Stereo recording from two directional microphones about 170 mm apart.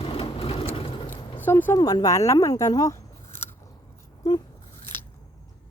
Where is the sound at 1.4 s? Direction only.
10° left (ahead or behind).